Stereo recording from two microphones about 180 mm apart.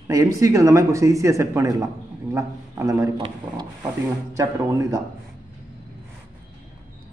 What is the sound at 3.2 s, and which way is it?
Speech, 30° right (ahead or behind).